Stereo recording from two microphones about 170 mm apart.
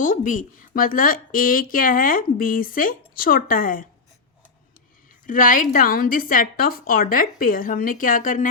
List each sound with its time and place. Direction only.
0.0 s speech: 50° left (ahead or behind)
5.2 s a woman's voice: 50° left (ahead or behind)